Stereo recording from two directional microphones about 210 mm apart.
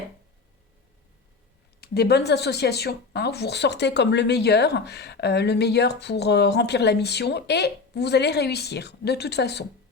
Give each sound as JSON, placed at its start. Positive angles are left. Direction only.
{"t": 1.8, "sound": "speech", "side_deg": 50}